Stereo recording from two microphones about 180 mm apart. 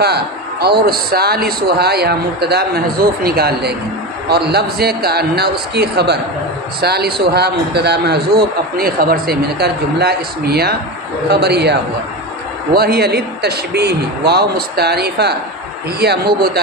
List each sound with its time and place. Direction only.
0.0 s a man's voice: 65° right (ahead or behind)